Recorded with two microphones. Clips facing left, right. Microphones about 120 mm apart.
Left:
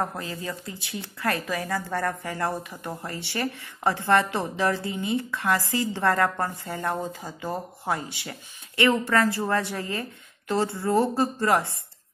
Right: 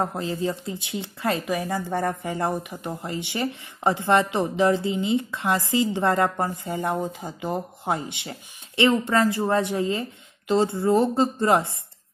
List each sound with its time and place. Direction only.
0.0 s speech: 25° right (ahead or behind)